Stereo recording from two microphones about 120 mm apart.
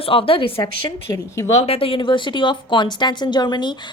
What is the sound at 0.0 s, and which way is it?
Speech, 50° left (ahead or behind).